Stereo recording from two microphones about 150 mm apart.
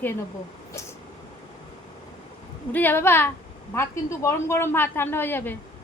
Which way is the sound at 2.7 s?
10° left (ahead or behind).